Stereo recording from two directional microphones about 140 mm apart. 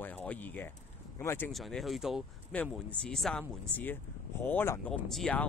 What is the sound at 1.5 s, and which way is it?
Speech, centre (ahead or behind).